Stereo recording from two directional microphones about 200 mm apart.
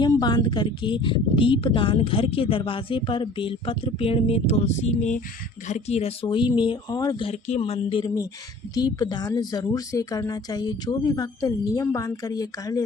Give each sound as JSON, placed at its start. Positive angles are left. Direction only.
{"t": 0.0, "sound": "speech", "side_deg": 20}
{"t": 7.3, "sound": "speech", "side_deg": 30}